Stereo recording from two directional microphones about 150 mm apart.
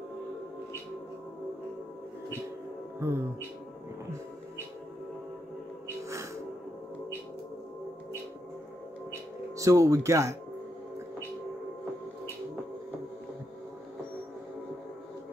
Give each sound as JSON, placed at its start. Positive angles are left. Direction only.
{"t": 3.0, "sound": "music", "side_deg": -15}
{"t": 9.6, "sound": "speech", "side_deg": -20}